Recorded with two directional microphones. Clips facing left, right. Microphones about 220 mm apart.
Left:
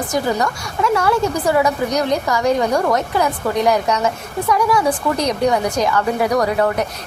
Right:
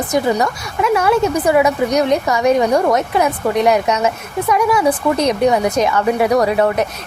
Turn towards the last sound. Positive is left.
turn(degrees=-20)  # may be behind; listen again after turning